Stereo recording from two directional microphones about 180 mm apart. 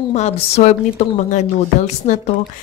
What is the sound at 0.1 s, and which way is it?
A woman's voice, 40° left (ahead or behind).